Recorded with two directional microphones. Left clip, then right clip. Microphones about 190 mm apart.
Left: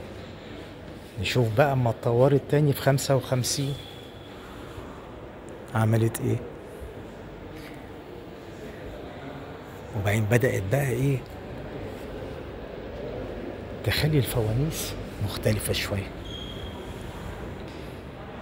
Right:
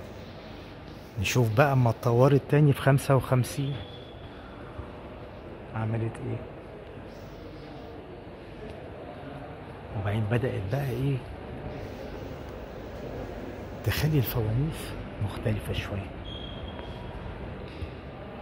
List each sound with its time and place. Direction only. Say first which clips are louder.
1.3 s speech: left 1 dB; 30° right (ahead or behind)
5.7 s a man's voice: left 8 dB; 35° left (ahead or behind)
10.0 s a man's voice: left 6 dB; 10° left (ahead or behind)
13.8 s speech: left 4 dB; 20° right (ahead or behind)
15.2 s speech: left 6 dB; centre (ahead or behind)